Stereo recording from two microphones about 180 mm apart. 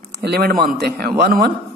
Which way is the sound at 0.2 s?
60° right (ahead or behind).